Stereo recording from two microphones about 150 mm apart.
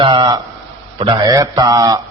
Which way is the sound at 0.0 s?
30° right (ahead or behind).